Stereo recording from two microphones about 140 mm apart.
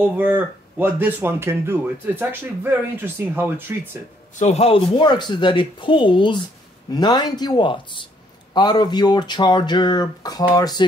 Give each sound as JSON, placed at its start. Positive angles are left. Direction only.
{"t": 0.2, "sound": "speech", "side_deg": -15}
{"t": 4.4, "sound": "speech", "side_deg": 50}